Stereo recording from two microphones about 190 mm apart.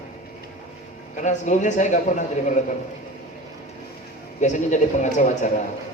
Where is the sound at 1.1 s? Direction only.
40° left (ahead or behind).